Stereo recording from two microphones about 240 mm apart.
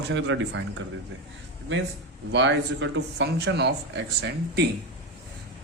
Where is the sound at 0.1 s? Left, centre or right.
Right.